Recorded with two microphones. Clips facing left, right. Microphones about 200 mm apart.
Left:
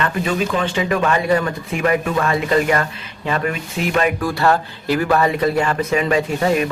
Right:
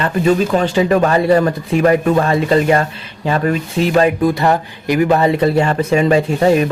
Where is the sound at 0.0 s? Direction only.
40° right (ahead or behind).